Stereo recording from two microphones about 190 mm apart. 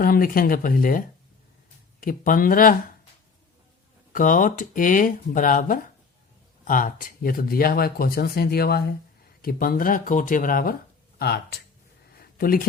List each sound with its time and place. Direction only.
0.0 s speech: 50° left (ahead or behind)
4.1 s speech: 45° left (ahead or behind)
12.1 s a sound: 50° left (ahead or behind)